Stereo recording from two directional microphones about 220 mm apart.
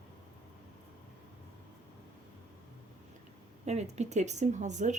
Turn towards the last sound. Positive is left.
turn(degrees=-35)  # may be behind; listen again after turning